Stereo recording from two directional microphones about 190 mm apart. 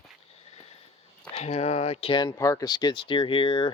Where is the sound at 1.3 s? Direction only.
35° left (ahead or behind).